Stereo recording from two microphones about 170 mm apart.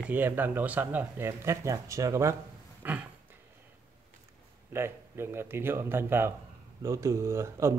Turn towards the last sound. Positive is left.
turn(degrees=-15)  # may be behind; listen again after turning